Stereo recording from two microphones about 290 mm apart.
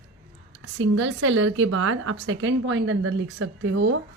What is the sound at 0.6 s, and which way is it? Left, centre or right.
A woman's voice, right.